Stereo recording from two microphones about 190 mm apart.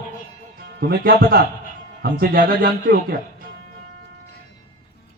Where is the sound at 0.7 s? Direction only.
55° right (ahead or behind).